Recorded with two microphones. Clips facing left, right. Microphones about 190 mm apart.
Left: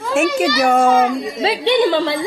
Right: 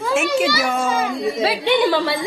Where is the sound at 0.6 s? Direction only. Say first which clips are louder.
Left 7 dB; 55° left (ahead or behind).